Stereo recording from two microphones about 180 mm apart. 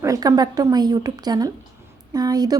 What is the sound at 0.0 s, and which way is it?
A woman's voice, 20° right (ahead or behind).